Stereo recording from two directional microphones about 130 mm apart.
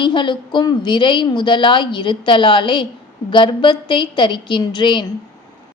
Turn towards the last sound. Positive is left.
turn(degrees=35)  # may be behind; listen again after turning